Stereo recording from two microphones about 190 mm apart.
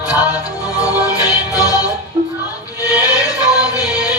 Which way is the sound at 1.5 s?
20° left (ahead or behind).